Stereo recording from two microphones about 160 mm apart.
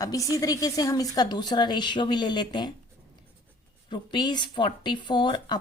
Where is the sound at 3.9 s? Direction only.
30° left (ahead or behind).